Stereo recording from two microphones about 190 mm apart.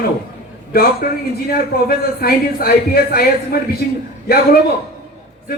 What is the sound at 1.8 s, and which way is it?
A man's voice, 55° left (ahead or behind).